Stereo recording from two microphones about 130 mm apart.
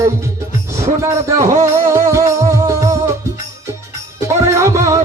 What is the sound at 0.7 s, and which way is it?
Music, 25° right (ahead or behind).